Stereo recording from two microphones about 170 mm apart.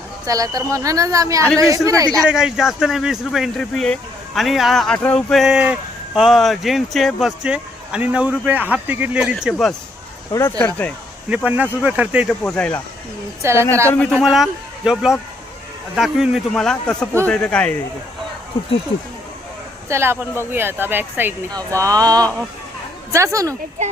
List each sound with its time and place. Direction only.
0.3 s speech: 20° right (ahead or behind)
2.2 s speech: 5° right (ahead or behind)
11.4 s speech: 10° right (ahead or behind)
12.4 s speech: 5° left (ahead or behind)
13.4 s speech: 15° right (ahead or behind)
13.8 s speech: 10° left (ahead or behind)
19.9 s speech: 15° right (ahead or behind)